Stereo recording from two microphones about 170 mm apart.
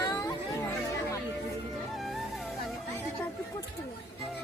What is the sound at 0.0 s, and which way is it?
Music, 20° left (ahead or behind).